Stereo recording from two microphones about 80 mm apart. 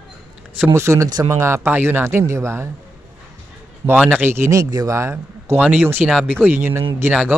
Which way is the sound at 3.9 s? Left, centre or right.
Centre.